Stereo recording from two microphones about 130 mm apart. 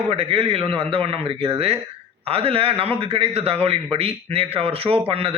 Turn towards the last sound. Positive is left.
turn(degrees=-45)  # may be behind; listen again after turning